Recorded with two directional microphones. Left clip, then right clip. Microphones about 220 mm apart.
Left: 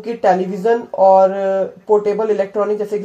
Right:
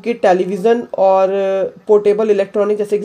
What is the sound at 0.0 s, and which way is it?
Speech, 45° right (ahead or behind).